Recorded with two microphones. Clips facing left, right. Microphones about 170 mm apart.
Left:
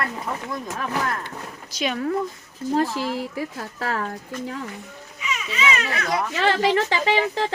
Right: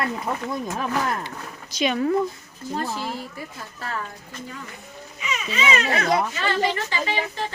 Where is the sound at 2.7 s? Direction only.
90° left.